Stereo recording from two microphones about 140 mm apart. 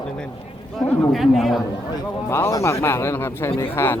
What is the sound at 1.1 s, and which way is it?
Speech, centre (ahead or behind).